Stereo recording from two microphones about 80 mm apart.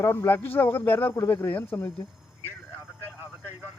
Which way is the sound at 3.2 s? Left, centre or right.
Right.